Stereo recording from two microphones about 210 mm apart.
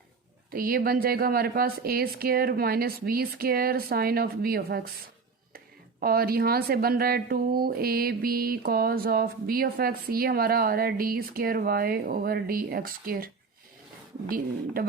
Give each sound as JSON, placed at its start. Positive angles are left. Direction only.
{"t": 0.5, "sound": "speech", "side_deg": -45}